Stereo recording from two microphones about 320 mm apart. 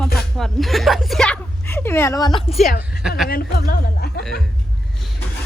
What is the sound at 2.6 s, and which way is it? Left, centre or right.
Speech, left.